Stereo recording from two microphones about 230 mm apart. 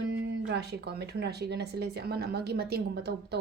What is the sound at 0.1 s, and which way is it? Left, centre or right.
Speech, right.